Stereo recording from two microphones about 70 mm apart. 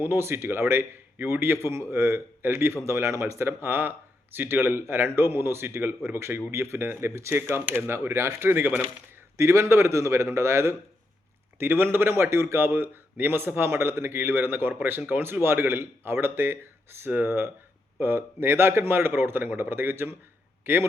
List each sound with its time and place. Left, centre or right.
0.0 s speech: right
9.4 s a man's voice: right